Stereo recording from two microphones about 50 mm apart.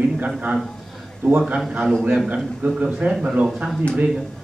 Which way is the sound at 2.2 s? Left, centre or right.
Right.